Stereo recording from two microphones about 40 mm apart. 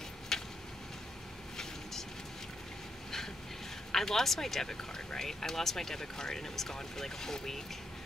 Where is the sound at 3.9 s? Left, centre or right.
Centre.